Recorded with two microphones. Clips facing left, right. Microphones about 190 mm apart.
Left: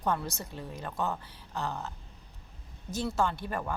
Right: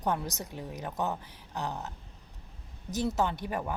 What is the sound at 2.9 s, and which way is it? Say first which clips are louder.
Speech: right 1 dB; 20° right (ahead or behind).